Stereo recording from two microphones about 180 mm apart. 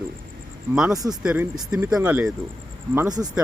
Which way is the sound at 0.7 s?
5° right (ahead or behind).